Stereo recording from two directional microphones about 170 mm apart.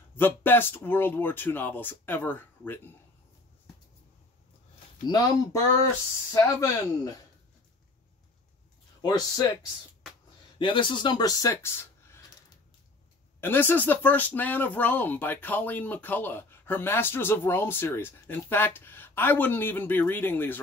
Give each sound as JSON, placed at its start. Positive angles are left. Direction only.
{"t": 0.2, "sound": "speech", "side_deg": 10}
{"t": 5.0, "sound": "speech", "side_deg": 25}
{"t": 9.0, "sound": "speech", "side_deg": 25}
{"t": 10.6, "sound": "speech", "side_deg": 30}
{"t": 13.4, "sound": "speech", "side_deg": 10}